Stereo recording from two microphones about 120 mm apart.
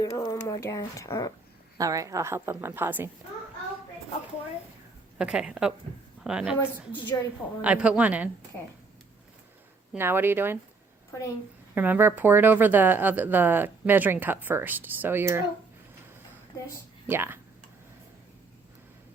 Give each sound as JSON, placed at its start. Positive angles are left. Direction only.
{"t": 0.0, "sound": "speech", "side_deg": 30}
{"t": 1.8, "sound": "a woman's voice", "side_deg": -30}
{"t": 5.1, "sound": "speech", "side_deg": -10}
{"t": 7.6, "sound": "speech", "side_deg": -10}
{"t": 10.0, "sound": "a woman's voice", "side_deg": -20}
{"t": 11.7, "sound": "speech", "side_deg": -15}
{"t": 17.1, "sound": "a woman's voice", "side_deg": -20}